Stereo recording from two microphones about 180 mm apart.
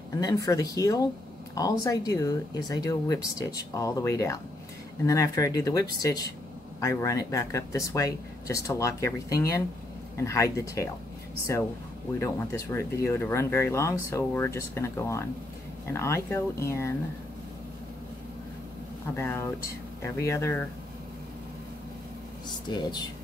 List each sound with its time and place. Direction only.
0.2 s speech: 20° left (ahead or behind)
12.2 s speech: 15° left (ahead or behind)
19.1 s speech: 15° left (ahead or behind)
22.5 s speech: 25° left (ahead or behind)